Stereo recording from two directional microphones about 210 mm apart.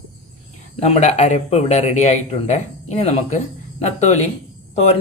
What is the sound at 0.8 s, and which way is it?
Speech, 30° left (ahead or behind).